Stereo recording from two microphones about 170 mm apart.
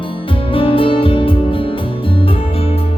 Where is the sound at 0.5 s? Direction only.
30° left (ahead or behind).